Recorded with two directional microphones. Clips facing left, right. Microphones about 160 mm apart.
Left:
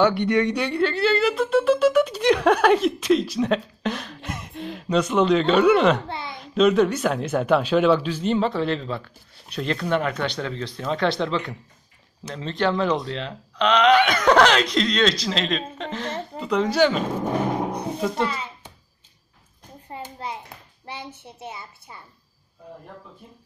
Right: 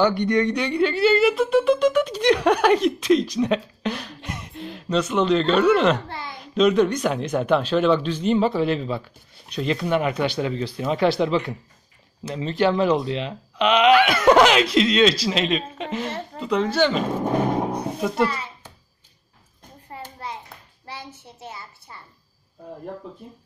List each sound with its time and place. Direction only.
0.0 s speech: 5° left (ahead or behind)
6.0 s a sound: 20° left (ahead or behind)
6.5 s speech: 5° left (ahead or behind)
19.9 s hands: 20° left (ahead or behind)
20.9 s a sound: 20° left (ahead or behind)
21.5 s a woman's voice: 20° left (ahead or behind)